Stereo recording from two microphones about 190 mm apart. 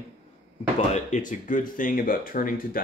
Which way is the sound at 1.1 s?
45° left (ahead or behind).